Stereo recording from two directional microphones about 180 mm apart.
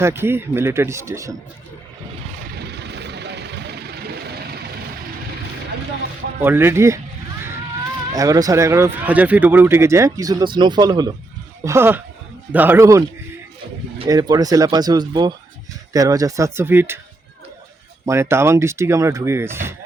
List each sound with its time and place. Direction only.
0.0 s speech: 15° right (ahead or behind)
2.5 s vehicle: 65° right (ahead or behind)
6.4 s speech: 10° right (ahead or behind)
8.1 s speech: 20° right (ahead or behind)
14.1 s speech: 20° right (ahead or behind)
18.0 s speech: 15° right (ahead or behind)